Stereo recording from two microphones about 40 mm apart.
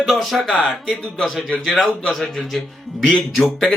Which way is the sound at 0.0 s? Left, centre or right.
Centre.